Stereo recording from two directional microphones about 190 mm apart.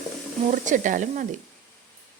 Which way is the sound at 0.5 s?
40° right (ahead or behind).